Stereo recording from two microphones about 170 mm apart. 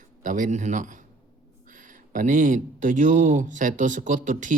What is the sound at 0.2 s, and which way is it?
A man's voice, 50° right (ahead or behind).